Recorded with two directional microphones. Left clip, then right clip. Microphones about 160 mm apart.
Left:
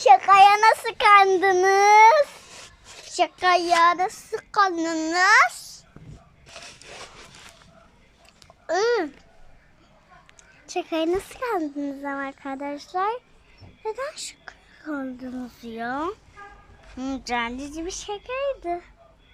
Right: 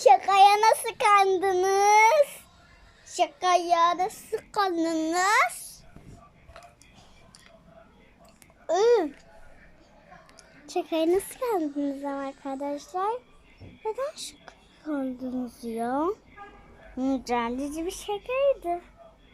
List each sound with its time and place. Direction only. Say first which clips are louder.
0.0 s child singing: left 4 dB; 25° right (ahead or behind)
3.1 s a child's voice: left 3 dB; 20° right (ahead or behind)
8.6 s a child's voice: right 1 dB; 20° right (ahead or behind)
10.7 s a child's voice: even; 25° right (ahead or behind)